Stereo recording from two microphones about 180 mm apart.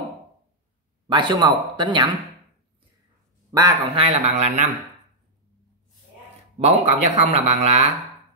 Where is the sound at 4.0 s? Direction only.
35° right (ahead or behind).